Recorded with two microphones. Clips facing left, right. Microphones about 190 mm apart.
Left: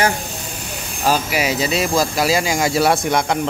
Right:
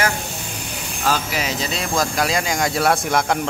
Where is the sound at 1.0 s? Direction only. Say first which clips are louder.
Left 4 dB; 10° left (ahead or behind).